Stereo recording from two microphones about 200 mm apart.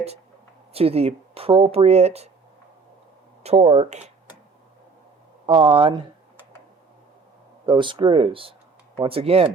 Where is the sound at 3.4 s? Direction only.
30° right (ahead or behind).